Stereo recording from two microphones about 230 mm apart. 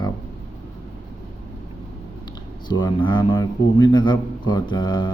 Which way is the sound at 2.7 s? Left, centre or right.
Centre.